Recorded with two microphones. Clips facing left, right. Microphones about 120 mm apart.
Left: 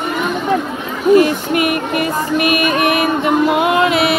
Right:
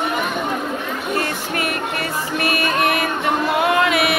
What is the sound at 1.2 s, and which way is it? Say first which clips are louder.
Music: left 10 dB; 15° left (ahead or behind).